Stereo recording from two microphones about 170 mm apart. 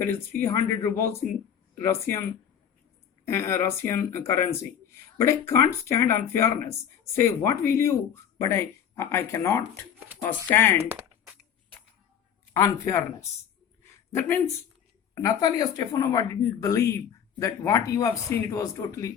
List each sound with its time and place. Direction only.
0.0 s speech: 15° left (ahead or behind)
3.2 s speech: 15° left (ahead or behind)
12.5 s speech: 20° left (ahead or behind)